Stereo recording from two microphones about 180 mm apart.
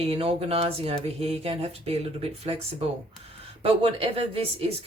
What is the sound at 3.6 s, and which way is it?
Speech, 30° right (ahead or behind).